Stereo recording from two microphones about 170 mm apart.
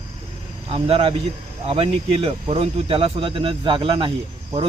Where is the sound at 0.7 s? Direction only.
35° right (ahead or behind).